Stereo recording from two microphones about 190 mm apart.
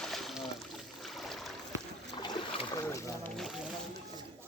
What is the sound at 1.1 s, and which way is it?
Boat, centre (ahead or behind).